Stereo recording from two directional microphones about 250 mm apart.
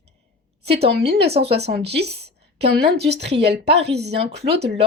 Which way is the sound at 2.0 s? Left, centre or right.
Right.